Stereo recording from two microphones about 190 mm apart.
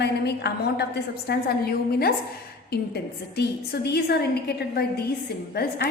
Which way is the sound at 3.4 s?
60° left (ahead or behind).